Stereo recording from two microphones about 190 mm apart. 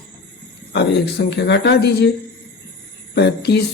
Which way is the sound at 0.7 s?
60° left (ahead or behind).